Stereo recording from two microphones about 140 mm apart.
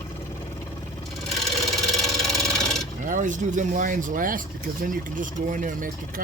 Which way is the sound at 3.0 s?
65° right (ahead or behind).